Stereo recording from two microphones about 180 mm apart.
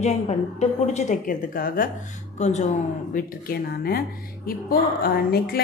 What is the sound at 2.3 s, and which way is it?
Speech, 40° left (ahead or behind).